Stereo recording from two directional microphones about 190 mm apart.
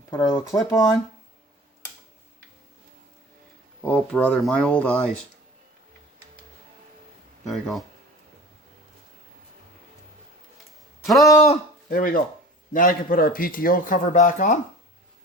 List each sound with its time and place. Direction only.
0.3 s speech: 20° left (ahead or behind)
3.8 s speech: 5° left (ahead or behind)
7.4 s speech: centre (ahead or behind)
11.0 s speech: centre (ahead or behind)
11.4 s speech: 45° left (ahead or behind)